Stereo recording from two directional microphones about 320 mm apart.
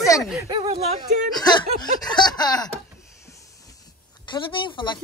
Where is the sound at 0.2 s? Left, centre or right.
Centre.